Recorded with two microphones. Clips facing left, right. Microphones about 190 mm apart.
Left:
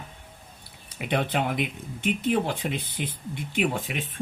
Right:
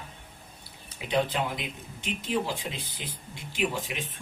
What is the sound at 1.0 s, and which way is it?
Speech, 60° left (ahead or behind).